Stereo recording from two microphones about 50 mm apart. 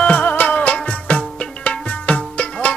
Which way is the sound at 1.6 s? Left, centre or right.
Left.